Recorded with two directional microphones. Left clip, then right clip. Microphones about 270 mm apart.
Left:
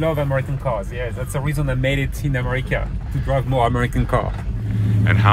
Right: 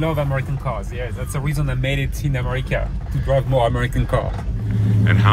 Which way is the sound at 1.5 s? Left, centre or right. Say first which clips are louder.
Left 3 dB; centre.